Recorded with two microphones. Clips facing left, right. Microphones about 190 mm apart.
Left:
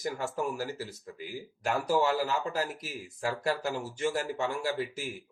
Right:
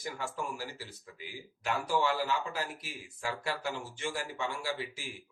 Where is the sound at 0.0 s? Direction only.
40° left (ahead or behind).